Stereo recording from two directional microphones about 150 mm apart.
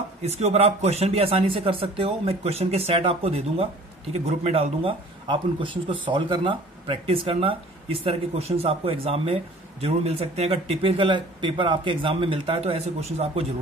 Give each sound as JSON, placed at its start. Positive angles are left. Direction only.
{"t": 0.2, "sound": "speech", "side_deg": -45}